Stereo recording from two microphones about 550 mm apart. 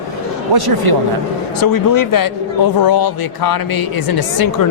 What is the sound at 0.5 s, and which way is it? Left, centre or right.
Speech, right.